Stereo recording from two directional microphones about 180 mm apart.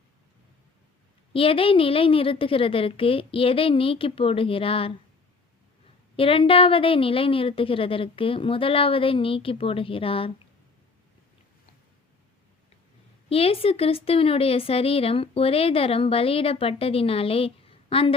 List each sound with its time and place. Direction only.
1.3 s a woman's voice: 30° left (ahead or behind)
6.1 s a woman's voice: 30° left (ahead or behind)
13.3 s a woman's voice: 30° left (ahead or behind)